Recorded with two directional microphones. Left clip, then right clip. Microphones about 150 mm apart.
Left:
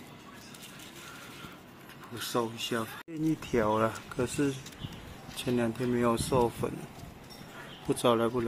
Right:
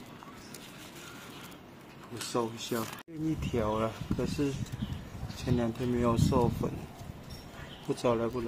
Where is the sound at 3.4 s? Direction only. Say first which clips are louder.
Left 4 dB; 20° left (ahead or behind).